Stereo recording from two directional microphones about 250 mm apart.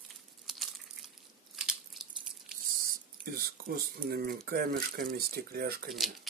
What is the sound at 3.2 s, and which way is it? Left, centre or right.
Speech, right.